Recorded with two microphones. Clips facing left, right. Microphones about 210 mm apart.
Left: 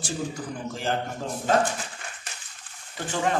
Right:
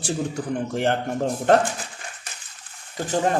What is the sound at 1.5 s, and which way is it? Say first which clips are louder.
Speech: right 5 dB; 65° right (ahead or behind).